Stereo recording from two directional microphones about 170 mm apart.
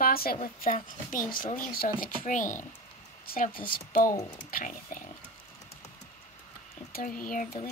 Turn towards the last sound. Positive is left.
turn(degrees=55)  # may be behind; listen again after turning